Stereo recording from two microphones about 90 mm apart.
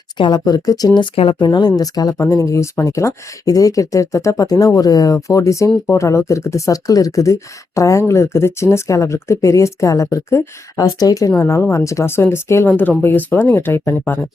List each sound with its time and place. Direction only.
0.2 s speech: 55° left (ahead or behind)
1.1 s speech: 80° left; by 2.1 s 45° left (ahead or behind)
2.1 s speech: 30° left (ahead or behind)